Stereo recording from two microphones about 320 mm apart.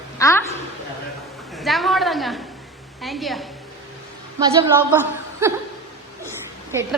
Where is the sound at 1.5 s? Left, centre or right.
Centre.